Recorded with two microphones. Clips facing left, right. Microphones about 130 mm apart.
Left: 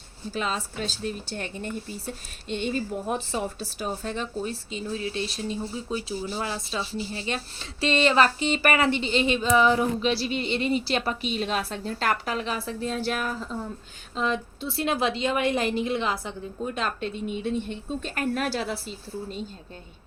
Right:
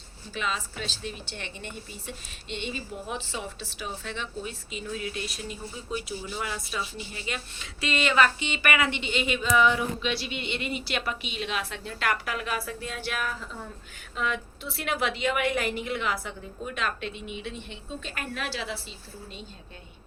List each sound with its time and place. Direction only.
0.3 s speech: 40° left (ahead or behind)